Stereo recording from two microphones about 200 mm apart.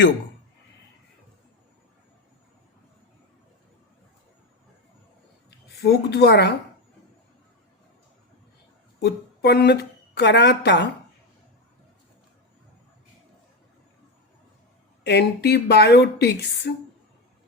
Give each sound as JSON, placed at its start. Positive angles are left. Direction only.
{"t": 5.6, "sound": "a woman's voice", "side_deg": 55}
{"t": 9.0, "sound": "a woman's voice", "side_deg": 55}
{"t": 15.0, "sound": "a woman's voice", "side_deg": 55}